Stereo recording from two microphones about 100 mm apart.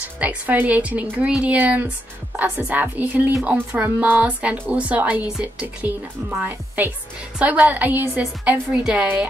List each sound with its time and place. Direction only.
0.2 s a woman's voice: 15° right (ahead or behind)